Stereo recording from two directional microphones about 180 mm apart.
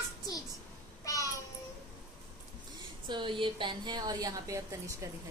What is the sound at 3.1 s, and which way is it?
A woman's voice, 25° right (ahead or behind).